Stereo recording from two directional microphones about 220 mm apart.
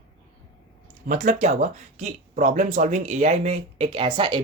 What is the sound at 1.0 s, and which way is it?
Speech, 35° right (ahead or behind).